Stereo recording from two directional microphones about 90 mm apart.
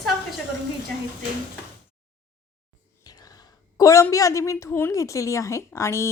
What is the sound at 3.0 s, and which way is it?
Whispering, 45° left (ahead or behind).